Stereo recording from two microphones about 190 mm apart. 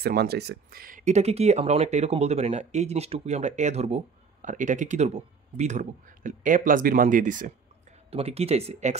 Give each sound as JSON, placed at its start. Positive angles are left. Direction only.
{"t": 0.0, "sound": "speech", "side_deg": -55}
{"t": 8.1, "sound": "speech", "side_deg": -30}